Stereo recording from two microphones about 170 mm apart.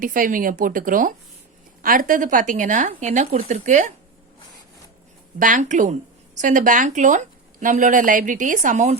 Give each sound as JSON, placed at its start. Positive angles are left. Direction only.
{"t": 0.0, "sound": "speech", "side_deg": -55}
{"t": 5.4, "sound": "speech", "side_deg": -50}